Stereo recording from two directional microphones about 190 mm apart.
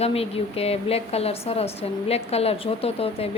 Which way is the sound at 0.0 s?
30° left (ahead or behind).